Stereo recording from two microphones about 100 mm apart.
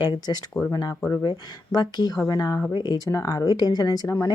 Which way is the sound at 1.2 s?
45° left (ahead or behind).